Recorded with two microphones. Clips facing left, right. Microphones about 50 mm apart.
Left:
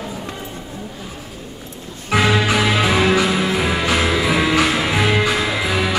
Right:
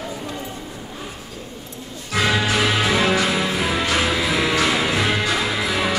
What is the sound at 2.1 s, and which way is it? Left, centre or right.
Music, left.